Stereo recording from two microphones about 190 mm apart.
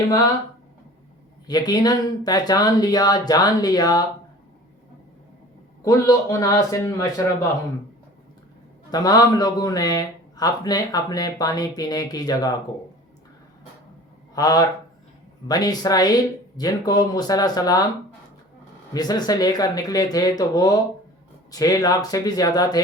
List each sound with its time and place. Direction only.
1.5 s a man's voice: 20° left (ahead or behind)
5.8 s a man's voice: 15° left (ahead or behind)
8.9 s a man's voice: 20° left (ahead or behind)
14.3 s a man's voice: 20° left (ahead or behind)
18.9 s a man's voice: 20° left (ahead or behind)